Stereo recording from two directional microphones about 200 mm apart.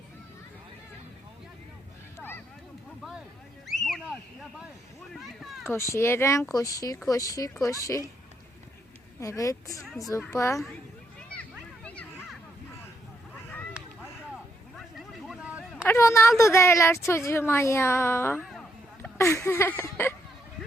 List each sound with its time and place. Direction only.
3.7 s a sound: centre (ahead or behind)
5.1 s a sound: centre (ahead or behind)
5.9 s speech: 15° left (ahead or behind)
9.2 s speech: 15° left (ahead or behind)
11.3 s children playing: 5° left (ahead or behind)
14.8 s vehicle: centre (ahead or behind)
15.8 s a woman's voice: 10° left (ahead or behind)